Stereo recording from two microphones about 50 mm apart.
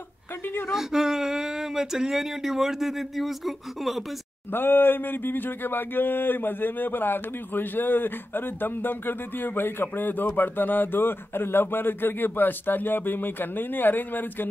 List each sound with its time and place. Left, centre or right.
0.7 s speech: centre
4.5 s speech: left